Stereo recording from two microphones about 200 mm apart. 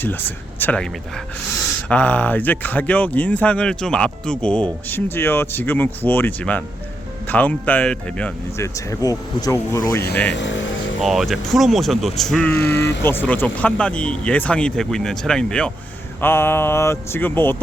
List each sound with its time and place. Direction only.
0.0 s speech: 10° left (ahead or behind)
10.3 s speech: 65° left (ahead or behind)
11.0 s speech: centre (ahead or behind)
12.5 s speech: 55° left (ahead or behind)
13.0 s speech: 10° left (ahead or behind)